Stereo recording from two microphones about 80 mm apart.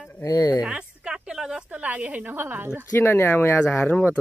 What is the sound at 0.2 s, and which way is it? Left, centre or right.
Speech, left.